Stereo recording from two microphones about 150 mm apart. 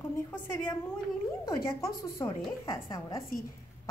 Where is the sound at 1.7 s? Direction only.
20° left (ahead or behind).